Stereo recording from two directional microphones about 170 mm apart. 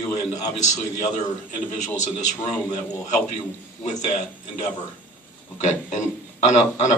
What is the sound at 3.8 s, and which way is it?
Speech, 45° left (ahead or behind).